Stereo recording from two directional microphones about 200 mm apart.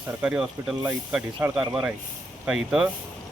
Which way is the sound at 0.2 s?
5° right (ahead or behind).